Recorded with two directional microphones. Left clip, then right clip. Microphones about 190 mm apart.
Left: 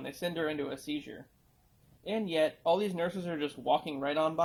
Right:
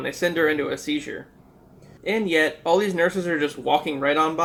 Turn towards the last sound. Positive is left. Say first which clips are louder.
# right 10 dB
turn(degrees=40)  # may be behind; listen again after turning